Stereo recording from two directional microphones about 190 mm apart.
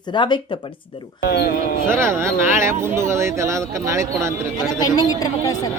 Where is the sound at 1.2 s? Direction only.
60° left (ahead or behind).